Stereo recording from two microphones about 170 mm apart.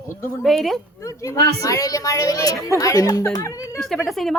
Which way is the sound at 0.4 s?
Centre (ahead or behind).